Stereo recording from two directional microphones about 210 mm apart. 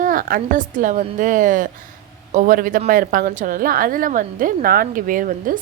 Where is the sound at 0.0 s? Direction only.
40° right (ahead or behind).